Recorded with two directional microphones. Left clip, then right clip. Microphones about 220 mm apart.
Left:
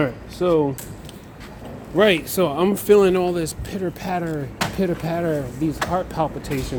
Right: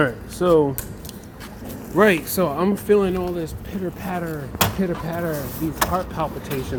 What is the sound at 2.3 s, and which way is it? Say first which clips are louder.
Speech: left 1 dB; 15° left (ahead or behind).